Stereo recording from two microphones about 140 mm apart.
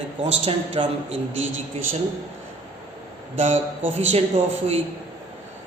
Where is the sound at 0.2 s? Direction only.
45° right (ahead or behind).